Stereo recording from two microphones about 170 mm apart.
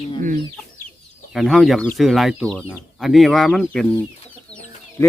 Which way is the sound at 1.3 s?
Centre (ahead or behind).